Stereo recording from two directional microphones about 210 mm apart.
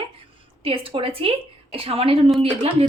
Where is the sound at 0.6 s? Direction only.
25° right (ahead or behind).